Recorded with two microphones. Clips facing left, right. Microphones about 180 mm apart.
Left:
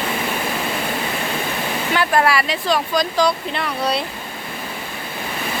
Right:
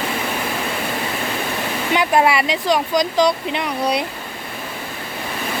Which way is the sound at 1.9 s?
20° right (ahead or behind).